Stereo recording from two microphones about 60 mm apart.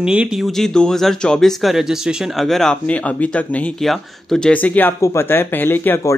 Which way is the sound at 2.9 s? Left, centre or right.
Left.